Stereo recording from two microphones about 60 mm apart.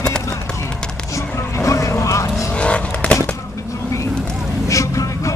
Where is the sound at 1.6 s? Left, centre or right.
Left.